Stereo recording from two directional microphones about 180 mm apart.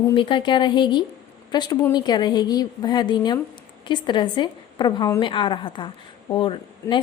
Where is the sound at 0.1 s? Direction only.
25° left (ahead or behind).